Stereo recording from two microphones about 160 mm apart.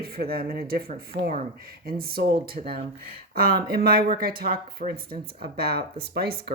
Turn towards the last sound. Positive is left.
turn(degrees=-75)  # may be behind; listen again after turning